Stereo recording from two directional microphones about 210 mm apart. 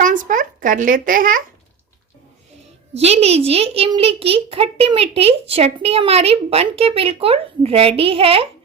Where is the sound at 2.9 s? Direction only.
30° right (ahead or behind).